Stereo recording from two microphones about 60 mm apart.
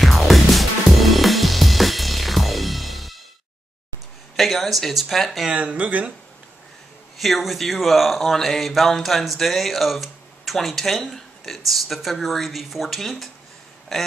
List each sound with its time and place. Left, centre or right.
0.0 s music: centre
4.4 s speech: centre
5.5 s speech: right
7.2 s speech: centre